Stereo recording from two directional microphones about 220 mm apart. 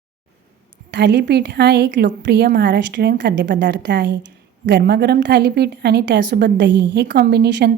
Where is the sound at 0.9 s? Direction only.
50° right (ahead or behind).